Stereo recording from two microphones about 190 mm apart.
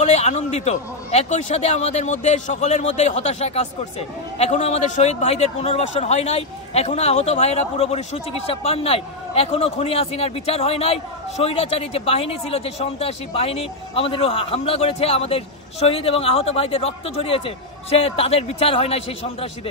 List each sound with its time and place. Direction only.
0.0 s a man's voice: 35° left (ahead or behind)